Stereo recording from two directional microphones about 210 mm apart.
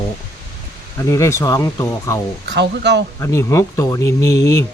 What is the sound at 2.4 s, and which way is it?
Speech, 55° right (ahead or behind).